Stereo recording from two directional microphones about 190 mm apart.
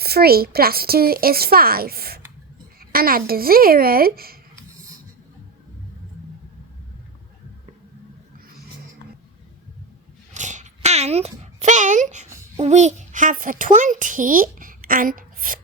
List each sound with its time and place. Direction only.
0.0 s a woman's voice: 55° right (ahead or behind)
10.3 s a sound: 40° right (ahead or behind)
12.5 s a child's voice: 35° right (ahead or behind)